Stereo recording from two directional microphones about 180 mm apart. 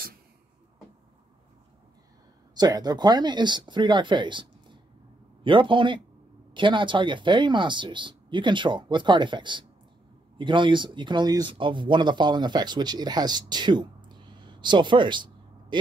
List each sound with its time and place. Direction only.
2.5 s speech: 25° right (ahead or behind)